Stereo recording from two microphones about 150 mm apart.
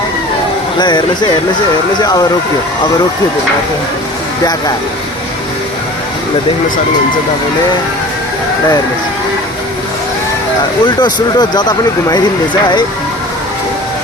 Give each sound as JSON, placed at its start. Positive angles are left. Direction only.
{"t": 0.8, "sound": "speech", "side_deg": 30}
{"t": 10.8, "sound": "speech", "side_deg": 30}